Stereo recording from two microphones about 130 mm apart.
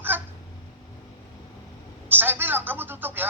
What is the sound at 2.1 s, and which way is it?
A woman's voice, 15° right (ahead or behind).